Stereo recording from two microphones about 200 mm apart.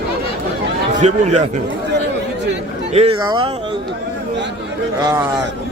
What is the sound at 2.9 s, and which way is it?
Speech, 30° right (ahead or behind).